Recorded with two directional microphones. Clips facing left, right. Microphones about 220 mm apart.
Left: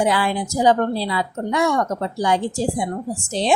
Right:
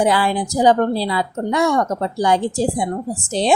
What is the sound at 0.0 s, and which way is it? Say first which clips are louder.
Speech: right 2 dB; 40° right (ahead or behind).